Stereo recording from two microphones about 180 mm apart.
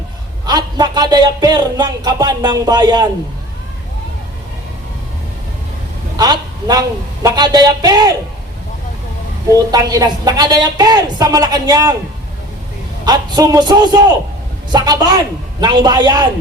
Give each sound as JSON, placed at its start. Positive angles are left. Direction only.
{"t": 0.4, "sound": "speech", "side_deg": -20}
{"t": 6.1, "sound": "speech", "side_deg": -20}
{"t": 9.7, "sound": "speech", "side_deg": -20}
{"t": 13.1, "sound": "speech", "side_deg": -20}